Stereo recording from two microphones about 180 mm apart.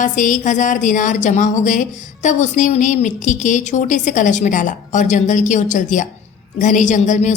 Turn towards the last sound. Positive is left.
turn(degrees=40)  # may be behind; listen again after turning